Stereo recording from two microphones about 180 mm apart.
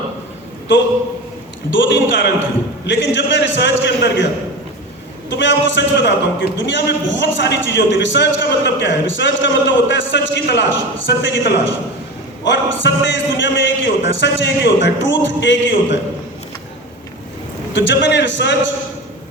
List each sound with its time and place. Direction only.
1.7 s a man's voice: 90° left
5.4 s a man's voice: 90° left
17.7 s a man's voice: 80° left